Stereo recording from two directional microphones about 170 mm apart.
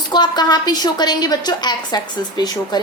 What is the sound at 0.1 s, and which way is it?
A woman's voice, 25° left (ahead or behind).